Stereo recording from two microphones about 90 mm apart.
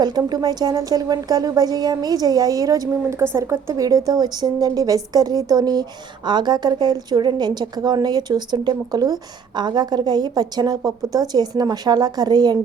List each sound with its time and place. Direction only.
0.0 s a woman's voice: 50° right (ahead or behind); by 3.8 s 30° right (ahead or behind)
3.8 s speech: 45° right (ahead or behind)